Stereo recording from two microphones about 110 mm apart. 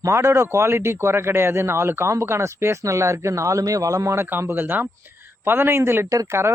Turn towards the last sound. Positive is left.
turn(degrees=-25)  # may be behind; listen again after turning